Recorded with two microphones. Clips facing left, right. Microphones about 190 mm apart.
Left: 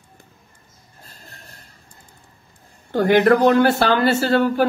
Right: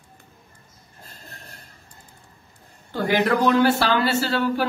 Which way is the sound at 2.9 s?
55° left (ahead or behind).